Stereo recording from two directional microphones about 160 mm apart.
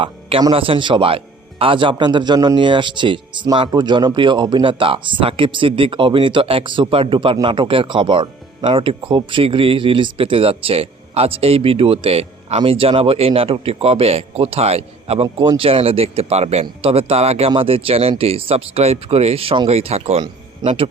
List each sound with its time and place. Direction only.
0.0 s a man's voice: 35° right (ahead or behind)